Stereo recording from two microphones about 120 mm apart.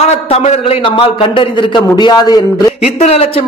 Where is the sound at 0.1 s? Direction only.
60° left (ahead or behind); by 2.4 s 35° left (ahead or behind).